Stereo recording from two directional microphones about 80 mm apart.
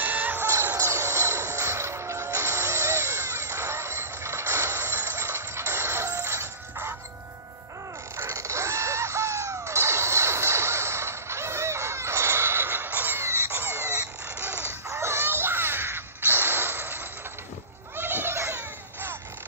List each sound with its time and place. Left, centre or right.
0.0 s music: right
0.7 s music: right
8.2 s music: right
14.9 s a sound: right